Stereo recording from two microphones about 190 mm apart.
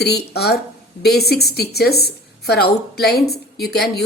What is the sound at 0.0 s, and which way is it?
A woman's voice, 60° left (ahead or behind).